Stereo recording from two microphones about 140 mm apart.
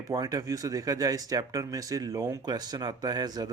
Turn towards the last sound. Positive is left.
turn(degrees=-30)  # may be behind; listen again after turning